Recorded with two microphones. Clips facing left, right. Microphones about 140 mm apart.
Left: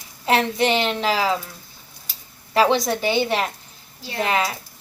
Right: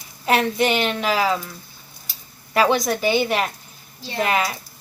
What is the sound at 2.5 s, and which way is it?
A woman's voice, 30° left (ahead or behind).